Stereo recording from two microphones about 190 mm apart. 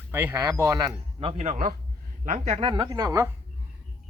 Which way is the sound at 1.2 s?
35° right (ahead or behind).